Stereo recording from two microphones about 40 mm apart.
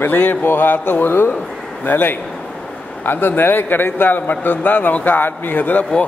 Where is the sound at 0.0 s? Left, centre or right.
Left.